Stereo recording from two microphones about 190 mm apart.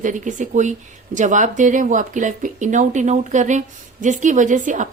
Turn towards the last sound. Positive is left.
turn(degrees=-40)  # may be behind; listen again after turning